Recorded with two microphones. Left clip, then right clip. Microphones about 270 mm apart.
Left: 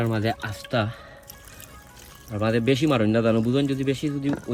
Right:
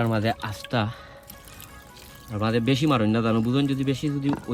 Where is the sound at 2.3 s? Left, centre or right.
Centre.